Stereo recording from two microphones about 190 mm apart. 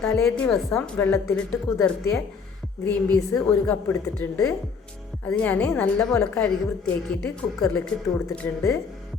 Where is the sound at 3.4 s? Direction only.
5° left (ahead or behind).